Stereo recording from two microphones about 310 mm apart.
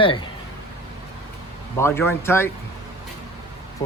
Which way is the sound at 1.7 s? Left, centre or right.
Centre.